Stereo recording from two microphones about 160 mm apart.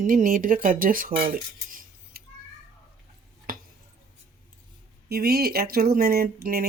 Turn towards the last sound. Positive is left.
turn(degrees=-70)  # may be behind; listen again after turning